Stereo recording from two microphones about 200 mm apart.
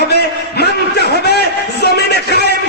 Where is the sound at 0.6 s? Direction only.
55° left (ahead or behind).